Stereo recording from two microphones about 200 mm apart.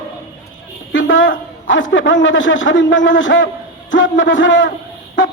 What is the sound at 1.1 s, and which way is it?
A man's voice, 70° left (ahead or behind).